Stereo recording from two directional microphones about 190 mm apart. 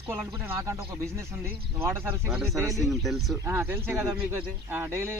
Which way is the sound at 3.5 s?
10° right (ahead or behind).